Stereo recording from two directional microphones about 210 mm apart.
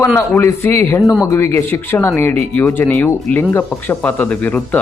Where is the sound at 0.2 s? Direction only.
10° left (ahead or behind).